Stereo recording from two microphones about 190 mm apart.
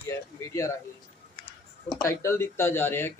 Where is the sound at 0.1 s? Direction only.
15° left (ahead or behind).